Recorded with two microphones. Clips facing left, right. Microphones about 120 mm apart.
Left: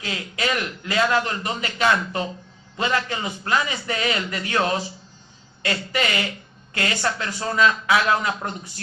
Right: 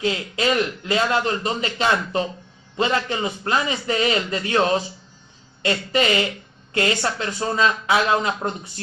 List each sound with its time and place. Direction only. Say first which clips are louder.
0.0 s a man's voice: right 5 dB; 25° right (ahead or behind)